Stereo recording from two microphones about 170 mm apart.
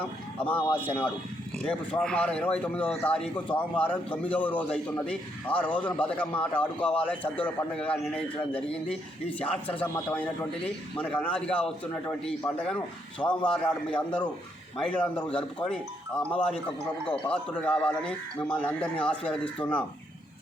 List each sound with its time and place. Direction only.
0.3 s speech: 10° left (ahead or behind)
9.8 s speech: 10° left (ahead or behind)